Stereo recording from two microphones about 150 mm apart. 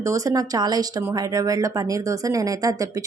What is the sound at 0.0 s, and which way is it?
A woman's voice, 20° right (ahead or behind).